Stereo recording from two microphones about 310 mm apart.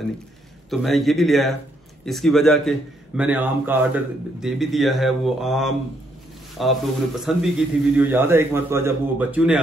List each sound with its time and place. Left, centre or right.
0.7 s a man's voice: centre